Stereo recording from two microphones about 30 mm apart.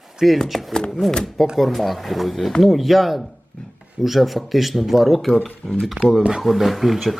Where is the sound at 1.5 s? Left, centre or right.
Centre.